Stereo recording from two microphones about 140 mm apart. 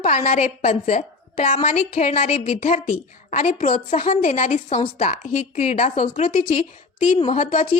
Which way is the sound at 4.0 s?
45° left (ahead or behind).